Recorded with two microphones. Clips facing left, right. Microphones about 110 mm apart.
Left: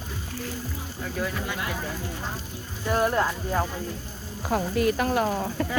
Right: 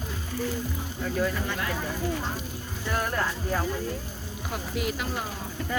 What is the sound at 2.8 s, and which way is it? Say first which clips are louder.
Speech: left 5 dB; 20° left (ahead or behind).